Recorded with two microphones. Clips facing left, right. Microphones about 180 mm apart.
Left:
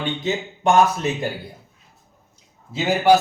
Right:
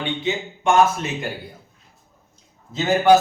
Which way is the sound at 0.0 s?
40° left (ahead or behind).